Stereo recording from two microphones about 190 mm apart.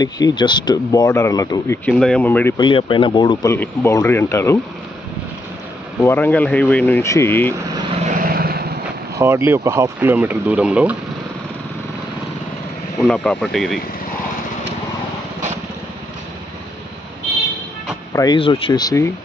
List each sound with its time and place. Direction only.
0.0 s speech: 20° left (ahead or behind)
1.9 s speech: 5° left (ahead or behind)
2.5 s speech: 25° left (ahead or behind)
3.5 s speech: 10° left (ahead or behind)
6.0 s speech: 10° left (ahead or behind)
8.1 s vehicle: 50° right (ahead or behind)
9.2 s speech: 10° right (ahead or behind)
13.0 s speech: 5° left (ahead or behind)
18.1 s speech: 20° left (ahead or behind)